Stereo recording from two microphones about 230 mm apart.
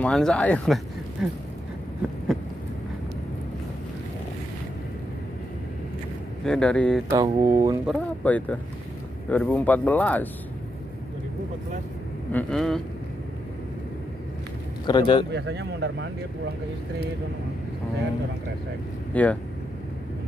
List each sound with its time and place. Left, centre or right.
0.0 s speech: centre
6.4 s speech: centre
7.1 s speech: centre
7.8 s speech: centre
12.3 s speech: centre
14.9 s a man's voice: centre
15.3 s speech: right
19.1 s speech: centre